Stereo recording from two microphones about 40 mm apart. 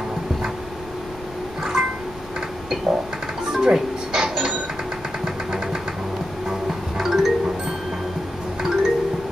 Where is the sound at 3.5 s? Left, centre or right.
Centre.